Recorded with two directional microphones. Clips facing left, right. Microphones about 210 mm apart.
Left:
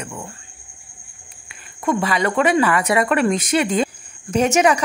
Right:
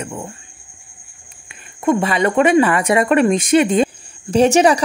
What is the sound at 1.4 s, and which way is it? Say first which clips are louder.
Speech: right 5 dB; 25° right (ahead or behind).